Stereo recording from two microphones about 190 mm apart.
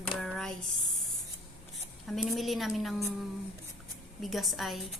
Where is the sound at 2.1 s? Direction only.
Centre (ahead or behind).